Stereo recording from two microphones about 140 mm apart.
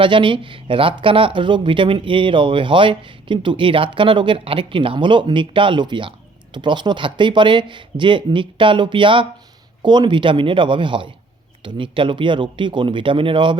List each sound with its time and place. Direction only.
0.0 s speech: 35° right (ahead or behind)